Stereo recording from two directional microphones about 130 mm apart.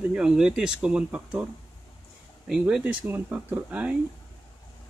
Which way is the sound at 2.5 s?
5° right (ahead or behind).